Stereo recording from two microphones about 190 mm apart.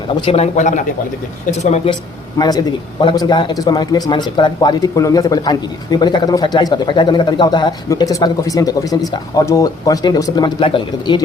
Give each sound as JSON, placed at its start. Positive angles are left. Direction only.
{"t": 0.2, "sound": "a man's voice", "side_deg": 30}
{"t": 2.4, "sound": "a man's voice", "side_deg": 20}